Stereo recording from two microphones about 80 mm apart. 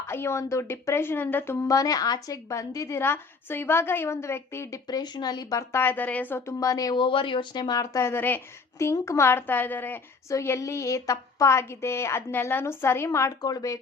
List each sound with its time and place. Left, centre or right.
0.1 s a woman's voice: left
1.7 s a woman's voice: left
4.9 s speech: left
5.7 s a woman's voice: left
6.9 s speech: left
7.9 s a woman's voice: left
10.2 s a woman's voice: left
13.4 s speech: left